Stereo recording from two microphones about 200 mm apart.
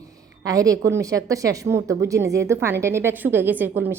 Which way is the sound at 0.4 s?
15° right (ahead or behind).